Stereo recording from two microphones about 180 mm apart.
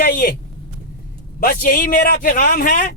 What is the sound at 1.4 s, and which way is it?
Speech, 55° left (ahead or behind).